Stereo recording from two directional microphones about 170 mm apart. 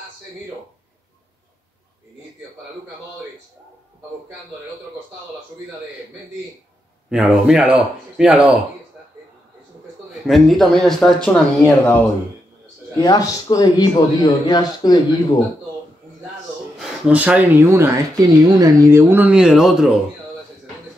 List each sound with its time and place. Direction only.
7.1 s speech: 5° right (ahead or behind)
10.2 s speech: centre (ahead or behind)
13.0 s speech: 20° left (ahead or behind)
16.7 s speech: 5° right (ahead or behind)